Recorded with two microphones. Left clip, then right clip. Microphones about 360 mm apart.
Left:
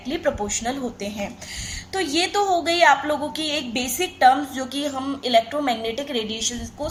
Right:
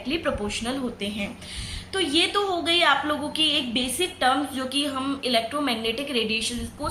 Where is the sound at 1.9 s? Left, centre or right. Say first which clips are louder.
Even; centre.